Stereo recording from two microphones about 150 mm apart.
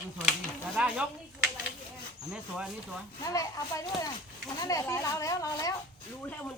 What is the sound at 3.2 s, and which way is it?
Speech, 20° left (ahead or behind).